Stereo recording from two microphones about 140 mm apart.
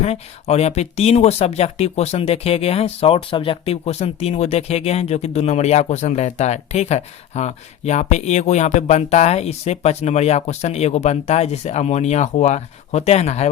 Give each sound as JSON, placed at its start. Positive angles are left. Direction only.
{"t": 0.0, "sound": "speech", "side_deg": 50}